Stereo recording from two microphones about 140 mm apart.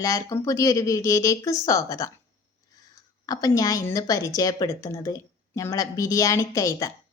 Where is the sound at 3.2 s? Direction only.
25° left (ahead or behind).